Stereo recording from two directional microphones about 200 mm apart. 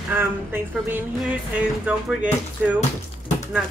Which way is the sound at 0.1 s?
10° right (ahead or behind).